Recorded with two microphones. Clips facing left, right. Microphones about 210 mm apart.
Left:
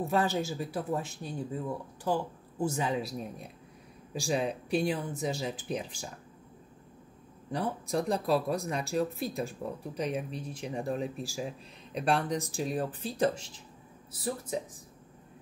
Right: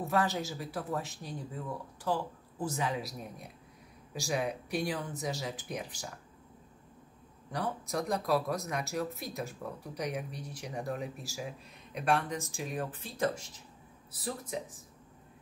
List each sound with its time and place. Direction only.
0.1 s speech: 30° left (ahead or behind)
7.5 s speech: 30° left (ahead or behind)